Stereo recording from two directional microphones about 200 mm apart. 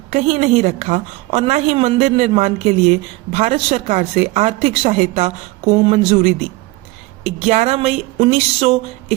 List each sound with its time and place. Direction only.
0.1 s a woman's voice: 35° right (ahead or behind)